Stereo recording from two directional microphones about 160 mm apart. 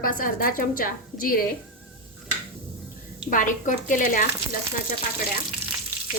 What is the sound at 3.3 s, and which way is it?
Speech, 55° left (ahead or behind).